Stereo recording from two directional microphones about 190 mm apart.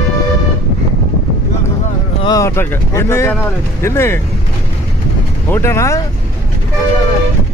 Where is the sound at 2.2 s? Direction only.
15° left (ahead or behind).